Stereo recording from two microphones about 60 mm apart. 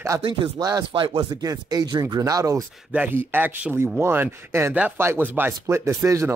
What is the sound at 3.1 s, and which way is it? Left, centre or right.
Speech, right.